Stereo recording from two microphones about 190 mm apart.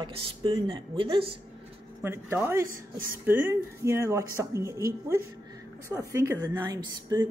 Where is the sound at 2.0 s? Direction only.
15° right (ahead or behind).